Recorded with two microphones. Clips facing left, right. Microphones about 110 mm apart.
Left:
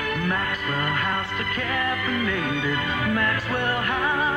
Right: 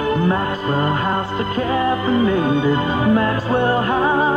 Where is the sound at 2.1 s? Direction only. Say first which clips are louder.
Right 9 dB; 25° right (ahead or behind).